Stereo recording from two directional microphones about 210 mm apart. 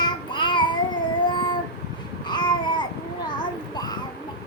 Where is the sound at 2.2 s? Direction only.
20° left (ahead or behind).